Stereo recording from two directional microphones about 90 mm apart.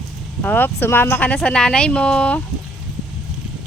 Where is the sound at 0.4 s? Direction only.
20° left (ahead or behind).